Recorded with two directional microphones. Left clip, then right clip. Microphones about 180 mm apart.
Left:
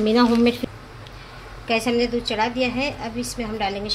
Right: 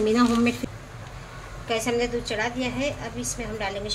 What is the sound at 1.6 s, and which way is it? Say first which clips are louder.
A woman's voice: left 4 dB; 65° left (ahead or behind).